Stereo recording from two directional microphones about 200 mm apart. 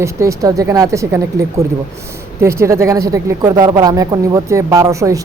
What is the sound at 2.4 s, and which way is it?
Speech, 15° right (ahead or behind).